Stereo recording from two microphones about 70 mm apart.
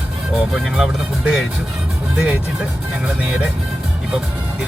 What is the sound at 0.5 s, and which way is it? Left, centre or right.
Speech, centre.